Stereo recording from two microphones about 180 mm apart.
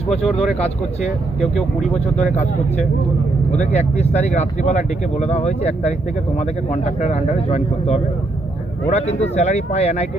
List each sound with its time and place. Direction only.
0.1 s speech: 35° left (ahead or behind)
1.8 s speech: 40° left (ahead or behind)
3.5 s speech: 40° left (ahead or behind)